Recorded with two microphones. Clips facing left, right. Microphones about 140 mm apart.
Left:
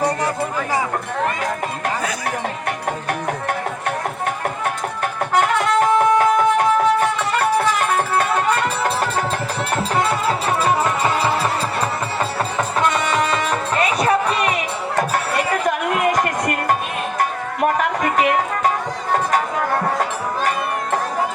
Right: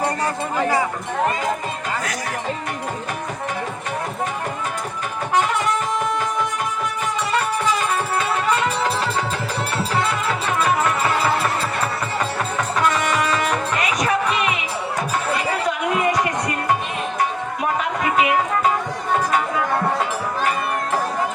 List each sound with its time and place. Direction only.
5.4 s music: 65° left (ahead or behind)
11.0 s music: 15° left (ahead or behind)
13.3 s music: 30° left (ahead or behind)
15.6 s music: 50° left (ahead or behind)